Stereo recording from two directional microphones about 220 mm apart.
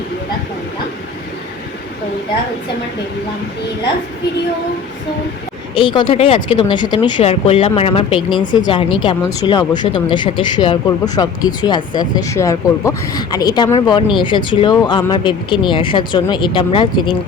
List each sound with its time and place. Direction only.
5.7 s speech: 20° left (ahead or behind)